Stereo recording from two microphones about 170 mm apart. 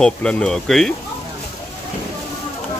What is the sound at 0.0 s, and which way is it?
Speech, 5° left (ahead or behind).